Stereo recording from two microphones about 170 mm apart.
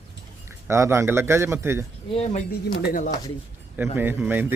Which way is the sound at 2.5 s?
55° left (ahead or behind).